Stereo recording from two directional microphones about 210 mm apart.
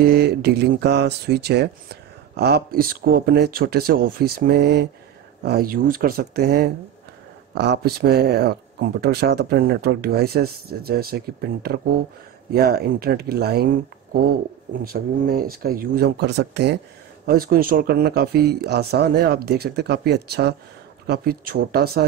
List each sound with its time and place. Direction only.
0.0 s speech: 50° right (ahead or behind)
14.8 s speech: 45° right (ahead or behind)